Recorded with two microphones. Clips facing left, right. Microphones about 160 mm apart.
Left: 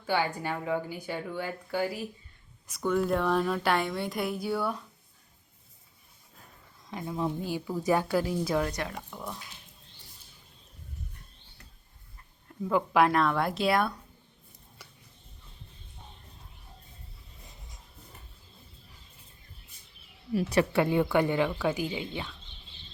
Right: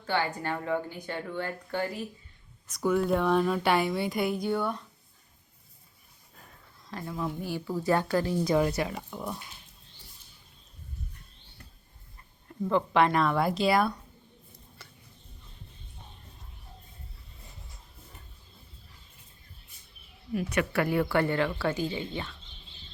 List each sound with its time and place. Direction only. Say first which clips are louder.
0.0 s speech: left 1 dB; 10° left (ahead or behind)
6.9 s speech: left 2 dB; 20° left (ahead or behind); by 9.4 s 5° right (ahead or behind)
12.5 s speech: right 1 dB; centre (ahead or behind)
14.8 s a sound: left 1 dB; 10° left (ahead or behind)
20.3 s speech: left 3 dB; 35° left (ahead or behind); by 22.4 s 10° left (ahead or behind)